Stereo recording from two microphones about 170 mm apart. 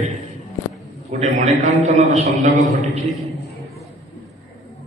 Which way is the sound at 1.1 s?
40° right (ahead or behind).